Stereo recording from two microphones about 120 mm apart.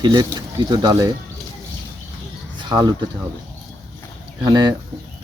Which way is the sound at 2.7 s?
35° right (ahead or behind).